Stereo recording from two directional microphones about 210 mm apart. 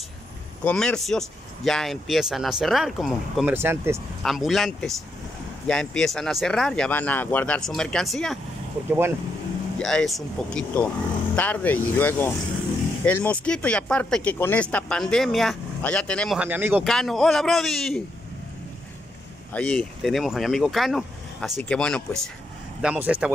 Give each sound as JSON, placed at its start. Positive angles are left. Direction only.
{"t": 0.7, "sound": "speech", "side_deg": 5}
{"t": 4.2, "sound": "speech", "side_deg": 0}
{"t": 9.8, "sound": "speech", "side_deg": 0}
{"t": 16.8, "sound": "speech", "side_deg": 0}
{"t": 19.5, "sound": "speech", "side_deg": 5}